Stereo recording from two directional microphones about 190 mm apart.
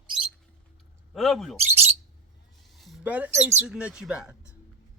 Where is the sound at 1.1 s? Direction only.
Centre (ahead or behind).